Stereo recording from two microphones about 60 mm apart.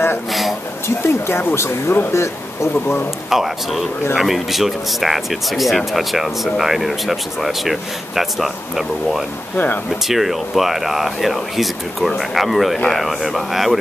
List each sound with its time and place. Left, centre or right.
0.3 s a sound: centre
0.8 s speech: left
3.3 s speech: centre